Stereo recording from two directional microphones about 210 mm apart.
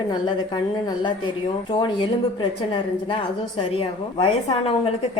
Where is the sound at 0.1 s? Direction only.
20° left (ahead or behind).